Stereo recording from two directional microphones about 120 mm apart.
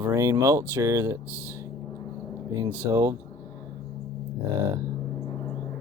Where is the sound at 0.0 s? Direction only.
25° right (ahead or behind).